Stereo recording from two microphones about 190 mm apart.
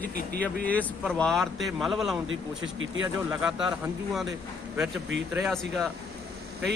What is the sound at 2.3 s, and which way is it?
Speech, 90° right.